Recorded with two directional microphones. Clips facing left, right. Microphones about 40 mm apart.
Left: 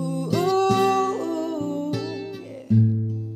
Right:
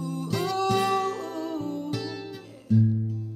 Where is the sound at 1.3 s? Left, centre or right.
Left.